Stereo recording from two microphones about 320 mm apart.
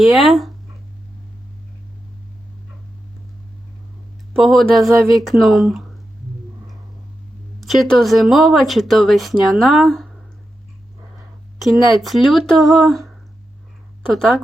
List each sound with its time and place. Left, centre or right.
0.0 s speech: centre
4.4 s speech: centre
7.6 s speech: centre
11.6 s speech: centre
14.1 s speech: centre